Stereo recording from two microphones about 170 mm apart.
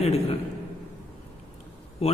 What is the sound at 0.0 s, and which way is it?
Speech, 35° left (ahead or behind).